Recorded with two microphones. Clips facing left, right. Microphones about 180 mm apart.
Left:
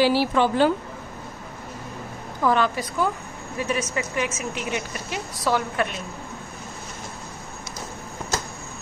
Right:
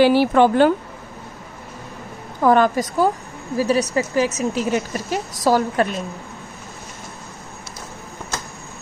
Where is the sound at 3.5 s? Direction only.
35° right (ahead or behind).